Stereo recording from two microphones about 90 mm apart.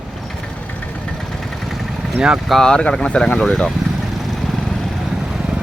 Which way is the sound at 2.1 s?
5° right (ahead or behind).